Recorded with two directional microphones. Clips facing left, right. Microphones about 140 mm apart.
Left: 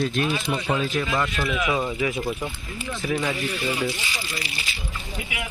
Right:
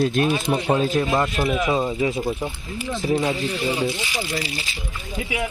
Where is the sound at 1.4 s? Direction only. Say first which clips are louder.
Right 3 dB; 30° right (ahead or behind).